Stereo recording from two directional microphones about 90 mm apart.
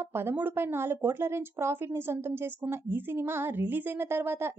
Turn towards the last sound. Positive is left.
turn(degrees=-25)  # may be behind; listen again after turning